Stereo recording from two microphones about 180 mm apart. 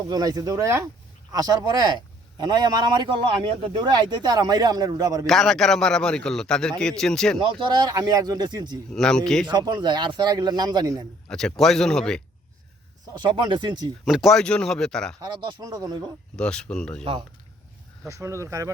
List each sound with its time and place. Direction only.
0.1 s a man's voice: 20° right (ahead or behind)
5.2 s a man's voice: centre (ahead or behind)
7.3 s a man's voice: 25° right (ahead or behind)
8.9 s a man's voice: 5° left (ahead or behind)
9.5 s a man's voice: 25° right (ahead or behind)
11.3 s a man's voice: centre (ahead or behind)
13.1 s a man's voice: 25° right (ahead or behind)
14.0 s a man's voice: centre (ahead or behind)
15.4 s a man's voice: 25° right (ahead or behind)
16.3 s a man's voice: 5° left (ahead or behind)
17.0 s a man's voice: 30° right (ahead or behind)
18.1 s speech: 15° right (ahead or behind)